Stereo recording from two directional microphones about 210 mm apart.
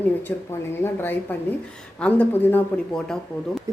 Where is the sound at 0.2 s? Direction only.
10° left (ahead or behind).